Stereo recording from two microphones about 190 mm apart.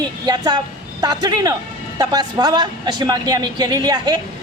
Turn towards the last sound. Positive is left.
turn(degrees=-20)  # may be behind; listen again after turning